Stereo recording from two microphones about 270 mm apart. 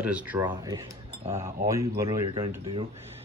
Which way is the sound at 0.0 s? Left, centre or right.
Centre.